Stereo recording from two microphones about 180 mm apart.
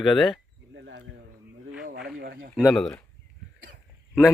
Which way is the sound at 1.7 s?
5° right (ahead or behind).